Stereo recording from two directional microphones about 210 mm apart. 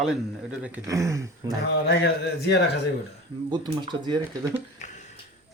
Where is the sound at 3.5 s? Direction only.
20° right (ahead or behind).